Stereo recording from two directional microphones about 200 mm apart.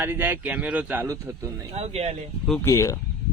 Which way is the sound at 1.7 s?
30° right (ahead or behind).